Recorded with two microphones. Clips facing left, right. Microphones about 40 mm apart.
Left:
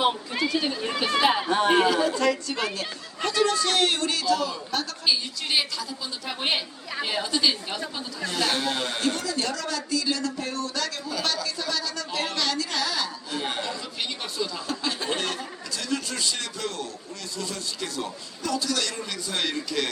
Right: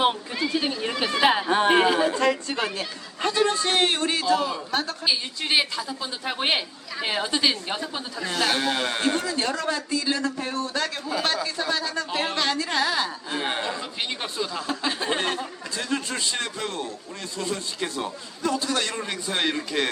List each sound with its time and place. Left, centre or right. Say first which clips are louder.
0.7 s a man's voice: even; centre; by 19.9 s right